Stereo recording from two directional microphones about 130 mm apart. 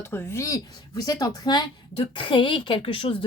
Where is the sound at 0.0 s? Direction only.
15° left (ahead or behind).